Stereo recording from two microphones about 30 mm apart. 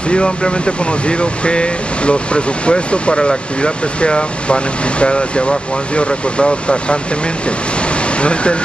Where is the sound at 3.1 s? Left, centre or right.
Left.